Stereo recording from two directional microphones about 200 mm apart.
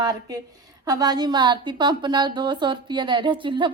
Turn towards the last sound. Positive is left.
turn(degrees=-25)  # may be behind; listen again after turning